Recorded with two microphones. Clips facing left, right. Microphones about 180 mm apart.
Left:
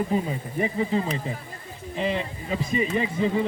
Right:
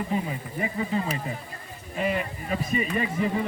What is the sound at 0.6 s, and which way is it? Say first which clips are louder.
Speech: left 3 dB; 25° left (ahead or behind).